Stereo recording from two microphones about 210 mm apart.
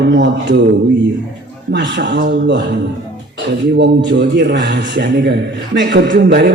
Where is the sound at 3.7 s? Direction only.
55° right (ahead or behind).